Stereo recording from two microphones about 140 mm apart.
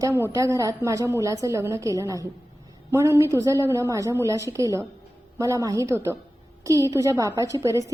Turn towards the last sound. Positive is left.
turn(degrees=-25)  # may be behind; listen again after turning